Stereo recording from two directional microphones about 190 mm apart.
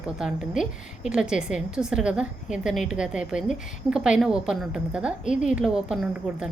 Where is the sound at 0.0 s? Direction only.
5° right (ahead or behind).